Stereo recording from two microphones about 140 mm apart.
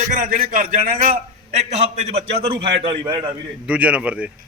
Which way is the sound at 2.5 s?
40° right (ahead or behind).